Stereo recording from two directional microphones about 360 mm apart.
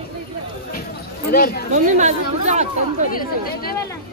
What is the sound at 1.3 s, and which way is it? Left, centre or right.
Speech, left.